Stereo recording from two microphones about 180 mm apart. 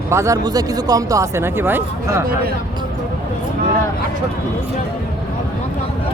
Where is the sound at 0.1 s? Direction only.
15° right (ahead or behind).